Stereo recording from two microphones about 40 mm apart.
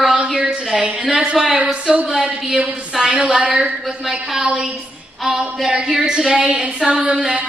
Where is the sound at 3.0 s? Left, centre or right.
Centre.